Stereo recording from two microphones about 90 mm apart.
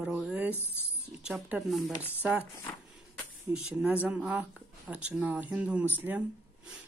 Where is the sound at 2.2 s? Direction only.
15° right (ahead or behind).